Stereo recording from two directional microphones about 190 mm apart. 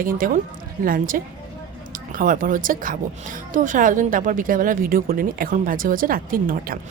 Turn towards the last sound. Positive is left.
turn(degrees=-50)  # may be behind; listen again after turning